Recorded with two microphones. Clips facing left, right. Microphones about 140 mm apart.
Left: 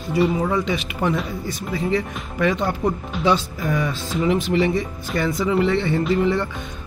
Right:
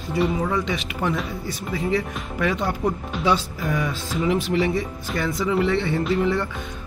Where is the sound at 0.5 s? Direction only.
5° left (ahead or behind).